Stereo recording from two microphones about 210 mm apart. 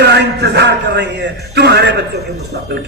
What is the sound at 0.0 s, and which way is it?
A man's voice, 55° right (ahead or behind).